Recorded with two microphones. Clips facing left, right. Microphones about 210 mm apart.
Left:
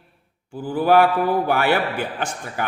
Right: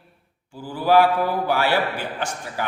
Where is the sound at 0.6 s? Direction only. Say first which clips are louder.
Left 1 dB; 50° left (ahead or behind).